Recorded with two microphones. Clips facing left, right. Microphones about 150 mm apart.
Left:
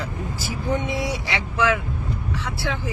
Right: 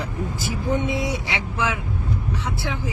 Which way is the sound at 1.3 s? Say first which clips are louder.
Left 3 dB; 20° right (ahead or behind).